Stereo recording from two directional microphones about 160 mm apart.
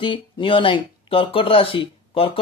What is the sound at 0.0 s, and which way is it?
Speech, 30° left (ahead or behind).